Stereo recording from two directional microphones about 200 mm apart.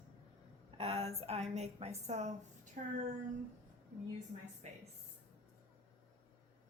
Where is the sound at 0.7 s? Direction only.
30° right (ahead or behind).